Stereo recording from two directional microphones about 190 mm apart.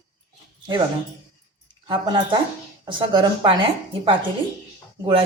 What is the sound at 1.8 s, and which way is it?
Speech, 25° right (ahead or behind).